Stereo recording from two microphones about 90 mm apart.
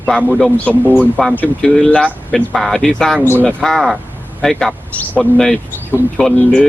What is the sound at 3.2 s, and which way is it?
Speech, 20° left (ahead or behind).